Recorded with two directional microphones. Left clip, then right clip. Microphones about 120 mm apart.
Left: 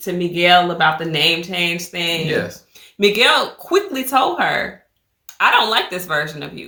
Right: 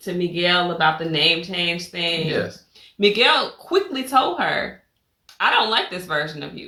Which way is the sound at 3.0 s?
35° left (ahead or behind).